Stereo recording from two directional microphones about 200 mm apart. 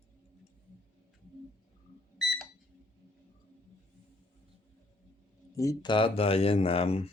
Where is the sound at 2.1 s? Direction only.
Centre (ahead or behind).